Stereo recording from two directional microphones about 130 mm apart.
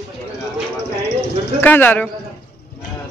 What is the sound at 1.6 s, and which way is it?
Speech, 15° left (ahead or behind).